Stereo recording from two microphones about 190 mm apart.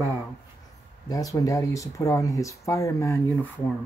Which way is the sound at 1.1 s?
20° left (ahead or behind).